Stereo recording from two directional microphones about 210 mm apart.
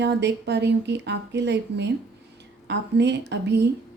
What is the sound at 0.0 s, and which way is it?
A woman's voice, 55° right (ahead or behind).